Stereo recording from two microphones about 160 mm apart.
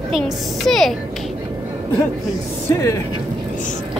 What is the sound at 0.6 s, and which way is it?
Speech, centre (ahead or behind).